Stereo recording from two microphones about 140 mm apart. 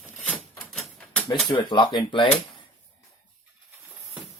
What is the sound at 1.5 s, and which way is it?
Speech, 35° left (ahead or behind).